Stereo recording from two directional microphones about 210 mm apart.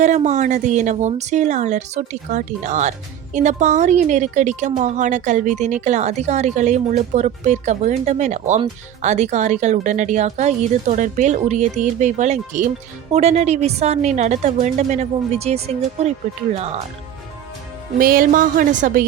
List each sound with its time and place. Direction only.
0.0 s speech: 35° right (ahead or behind)
18.0 s speech: 45° right (ahead or behind)